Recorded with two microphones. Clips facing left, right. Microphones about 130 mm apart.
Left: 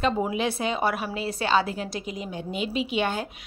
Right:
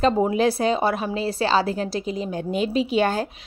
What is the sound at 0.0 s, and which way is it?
A woman's voice, 35° right (ahead or behind).